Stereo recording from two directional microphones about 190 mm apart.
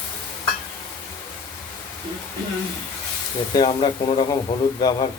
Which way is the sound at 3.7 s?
30° left (ahead or behind).